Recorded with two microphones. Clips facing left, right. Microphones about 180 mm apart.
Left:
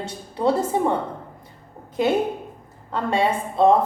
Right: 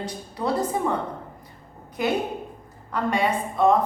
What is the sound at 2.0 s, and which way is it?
Speech, 25° left (ahead or behind).